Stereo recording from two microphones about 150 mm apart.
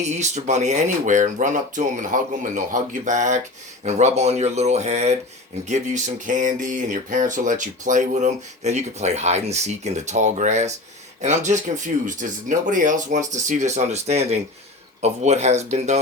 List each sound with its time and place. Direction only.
0.0 s speech: 50° right (ahead or behind)